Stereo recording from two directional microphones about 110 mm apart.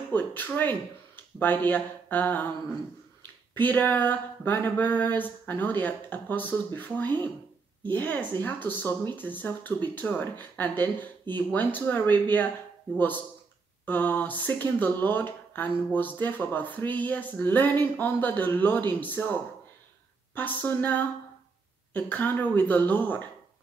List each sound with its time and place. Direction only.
0.1 s speech: 15° left (ahead or behind)
3.5 s speech: 15° left (ahead or behind)